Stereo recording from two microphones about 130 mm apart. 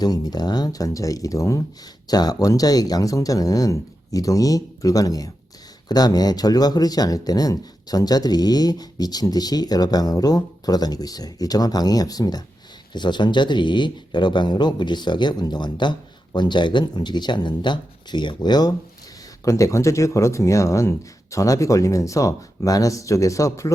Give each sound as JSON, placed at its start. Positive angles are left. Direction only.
{"t": 0.0, "sound": "speech", "side_deg": 30}